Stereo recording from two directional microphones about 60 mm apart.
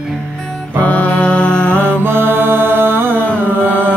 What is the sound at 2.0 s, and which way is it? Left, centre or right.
Mantra, right.